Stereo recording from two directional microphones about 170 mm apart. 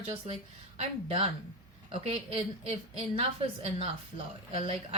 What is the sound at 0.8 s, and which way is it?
A woman's voice, 40° right (ahead or behind).